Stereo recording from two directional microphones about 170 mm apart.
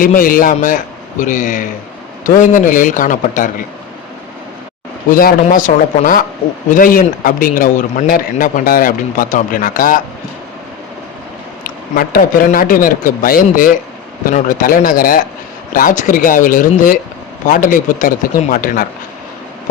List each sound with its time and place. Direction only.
0.0 s a man's voice: 55° left (ahead or behind)
5.2 s a man's voice: 50° left (ahead or behind)
11.6 s a man's voice: 60° left (ahead or behind)